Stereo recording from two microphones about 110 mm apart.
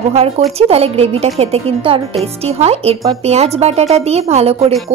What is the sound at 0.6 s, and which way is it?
A woman's voice, 65° right (ahead or behind).